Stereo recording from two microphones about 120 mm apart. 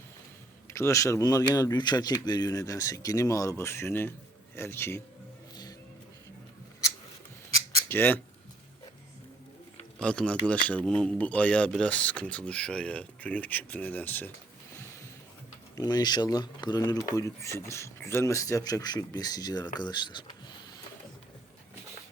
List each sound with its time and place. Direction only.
0.7 s speech: 25° left (ahead or behind)
7.9 s speech: 20° left (ahead or behind)
10.0 s speech: 10° left (ahead or behind)
15.7 s speech: 35° left (ahead or behind)